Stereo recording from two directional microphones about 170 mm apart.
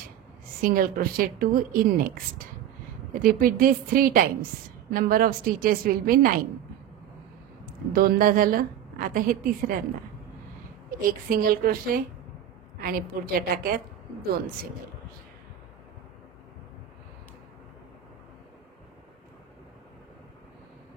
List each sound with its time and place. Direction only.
0.6 s a woman's voice: 55° right (ahead or behind)
7.9 s a woman's voice: 60° right (ahead or behind)
11.1 s a woman's voice: 55° right (ahead or behind)